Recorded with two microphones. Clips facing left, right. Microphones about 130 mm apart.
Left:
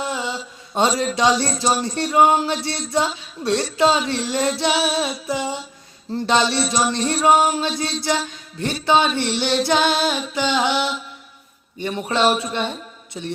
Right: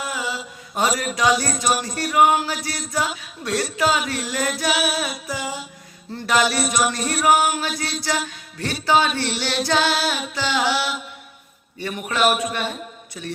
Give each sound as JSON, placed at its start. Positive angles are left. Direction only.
{"t": 0.0, "sound": "mantra", "side_deg": 25}
{"t": 3.2, "sound": "female singing", "side_deg": 30}
{"t": 8.0, "sound": "music", "side_deg": 20}
{"t": 8.9, "sound": "female singing", "side_deg": 20}